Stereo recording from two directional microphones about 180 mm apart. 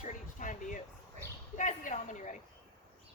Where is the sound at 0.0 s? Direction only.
45° left (ahead or behind).